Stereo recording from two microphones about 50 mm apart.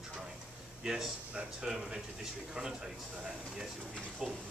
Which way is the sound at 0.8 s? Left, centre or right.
Centre.